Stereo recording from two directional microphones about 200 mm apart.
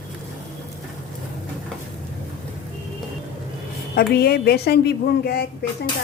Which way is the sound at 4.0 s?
50° left (ahead or behind).